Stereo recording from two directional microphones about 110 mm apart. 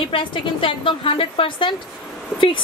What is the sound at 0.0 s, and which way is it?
A woman's voice, 50° left (ahead or behind).